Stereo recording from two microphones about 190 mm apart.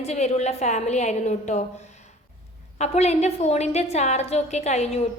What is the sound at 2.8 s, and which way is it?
A woman's voice, 35° left (ahead or behind).